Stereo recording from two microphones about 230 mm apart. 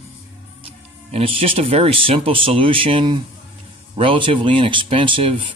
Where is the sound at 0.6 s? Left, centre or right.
Right.